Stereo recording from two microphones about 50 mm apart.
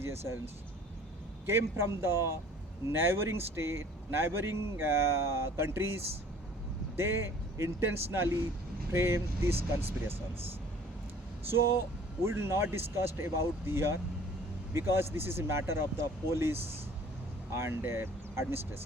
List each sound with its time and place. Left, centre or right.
0.0 s speech: right
1.5 s speech: right
8.9 s speech: right
11.5 s speech: right